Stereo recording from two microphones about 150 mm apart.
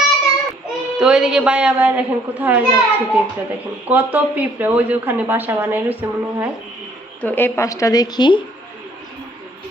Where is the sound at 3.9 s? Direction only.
10° right (ahead or behind).